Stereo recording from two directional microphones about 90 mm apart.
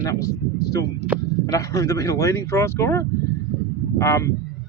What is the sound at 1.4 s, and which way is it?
Speech, 40° left (ahead or behind).